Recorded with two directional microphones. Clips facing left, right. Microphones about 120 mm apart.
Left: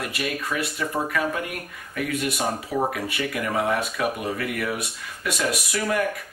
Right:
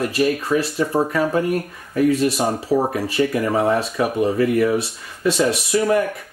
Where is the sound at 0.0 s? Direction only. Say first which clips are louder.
Right 9 dB; 30° right (ahead or behind).